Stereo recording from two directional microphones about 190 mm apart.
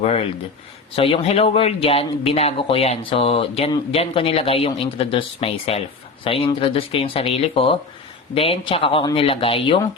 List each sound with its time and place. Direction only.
0.0 s speech: 30° left (ahead or behind)